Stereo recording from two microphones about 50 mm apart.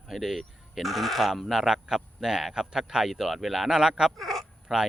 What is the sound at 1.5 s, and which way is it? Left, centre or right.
A man's voice, centre.